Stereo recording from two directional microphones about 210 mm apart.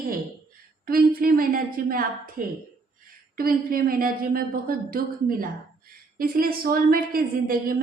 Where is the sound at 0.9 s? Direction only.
45° right (ahead or behind).